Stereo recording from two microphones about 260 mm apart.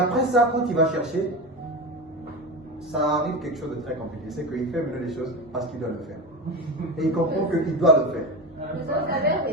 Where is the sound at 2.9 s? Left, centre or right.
Centre.